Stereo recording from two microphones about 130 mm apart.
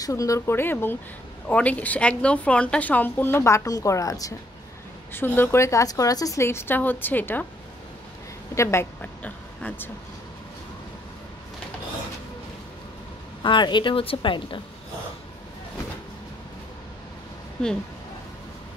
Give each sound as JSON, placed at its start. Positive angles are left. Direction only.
{"t": 0.0, "sound": "a woman's voice", "side_deg": 25}
{"t": 5.1, "sound": "a woman's voice", "side_deg": 15}
{"t": 8.5, "sound": "a woman's voice", "side_deg": 20}
{"t": 13.4, "sound": "a woman's voice", "side_deg": 35}